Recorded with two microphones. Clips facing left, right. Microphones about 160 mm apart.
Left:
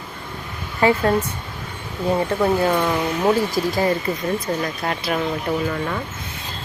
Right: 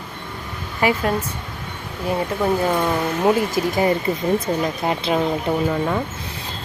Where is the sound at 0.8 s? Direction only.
15° right (ahead or behind).